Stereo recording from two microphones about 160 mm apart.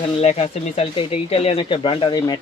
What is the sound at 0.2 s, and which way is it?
Speech, 40° left (ahead or behind).